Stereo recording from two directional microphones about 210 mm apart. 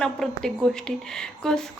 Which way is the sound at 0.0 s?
5° left (ahead or behind).